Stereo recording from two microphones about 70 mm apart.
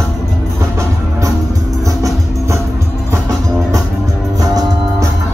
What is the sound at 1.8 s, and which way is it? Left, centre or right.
Music, right.